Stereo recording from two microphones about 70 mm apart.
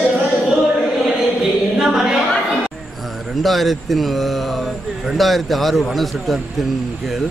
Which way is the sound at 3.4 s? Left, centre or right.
Centre.